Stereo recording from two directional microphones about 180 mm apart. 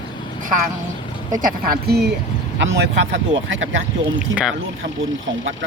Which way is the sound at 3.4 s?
90° right.